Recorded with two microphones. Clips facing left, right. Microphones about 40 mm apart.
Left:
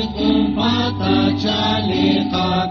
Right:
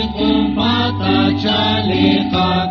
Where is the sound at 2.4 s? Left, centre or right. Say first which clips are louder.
Right 3 dB; right.